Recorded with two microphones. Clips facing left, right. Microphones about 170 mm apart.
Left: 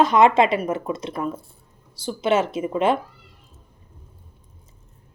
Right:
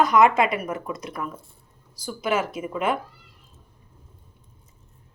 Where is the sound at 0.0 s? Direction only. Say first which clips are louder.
Left 2 dB; 25° left (ahead or behind).